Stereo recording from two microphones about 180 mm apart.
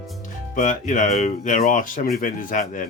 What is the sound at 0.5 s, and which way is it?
Speech, 40° left (ahead or behind).